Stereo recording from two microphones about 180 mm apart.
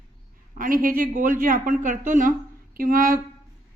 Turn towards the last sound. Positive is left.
turn(degrees=-50)  # may be behind; listen again after turning